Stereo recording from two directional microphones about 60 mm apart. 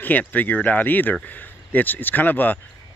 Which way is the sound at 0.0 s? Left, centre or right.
Left.